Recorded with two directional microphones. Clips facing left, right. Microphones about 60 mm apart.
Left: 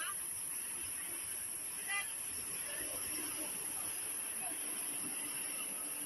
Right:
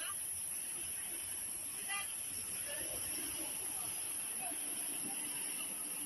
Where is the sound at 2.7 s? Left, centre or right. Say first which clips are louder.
Left 1 dB; left.